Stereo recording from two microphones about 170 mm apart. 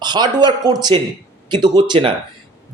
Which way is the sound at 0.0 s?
25° right (ahead or behind).